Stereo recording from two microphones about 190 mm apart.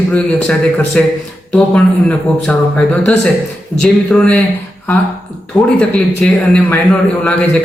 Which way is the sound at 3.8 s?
5° left (ahead or behind).